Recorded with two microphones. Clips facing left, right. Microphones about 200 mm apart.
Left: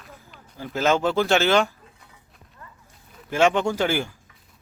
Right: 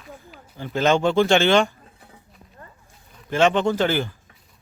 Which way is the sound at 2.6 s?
35° right (ahead or behind).